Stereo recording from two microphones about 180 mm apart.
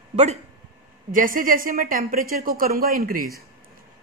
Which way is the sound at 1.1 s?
50° right (ahead or behind).